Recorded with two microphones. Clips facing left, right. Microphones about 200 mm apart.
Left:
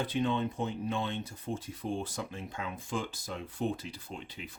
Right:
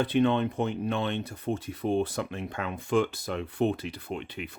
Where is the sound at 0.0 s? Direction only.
65° right (ahead or behind).